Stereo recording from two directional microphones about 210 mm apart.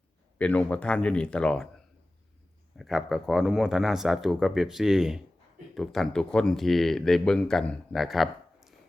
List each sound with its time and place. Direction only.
0.3 s speech: 5° left (ahead or behind)
2.7 s speech: centre (ahead or behind)